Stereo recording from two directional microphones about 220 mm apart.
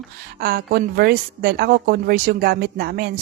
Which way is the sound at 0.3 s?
45° right (ahead or behind).